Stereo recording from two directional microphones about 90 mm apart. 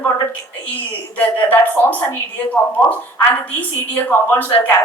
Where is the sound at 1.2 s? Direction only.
15° left (ahead or behind).